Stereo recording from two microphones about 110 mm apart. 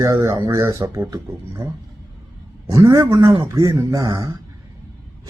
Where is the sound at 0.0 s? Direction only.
30° right (ahead or behind).